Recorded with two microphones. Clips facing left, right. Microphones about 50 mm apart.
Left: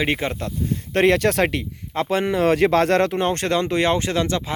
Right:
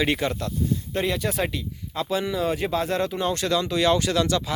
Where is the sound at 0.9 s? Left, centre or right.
Left.